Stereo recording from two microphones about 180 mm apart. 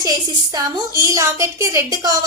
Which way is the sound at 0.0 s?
20° right (ahead or behind).